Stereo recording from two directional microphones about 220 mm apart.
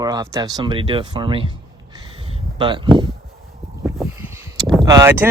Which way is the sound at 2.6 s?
20° right (ahead or behind).